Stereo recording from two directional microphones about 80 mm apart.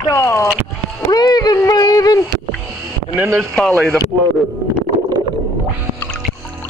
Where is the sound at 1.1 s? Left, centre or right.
Left.